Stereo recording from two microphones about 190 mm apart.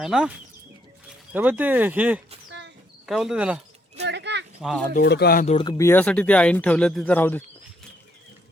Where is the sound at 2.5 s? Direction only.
70° right (ahead or behind).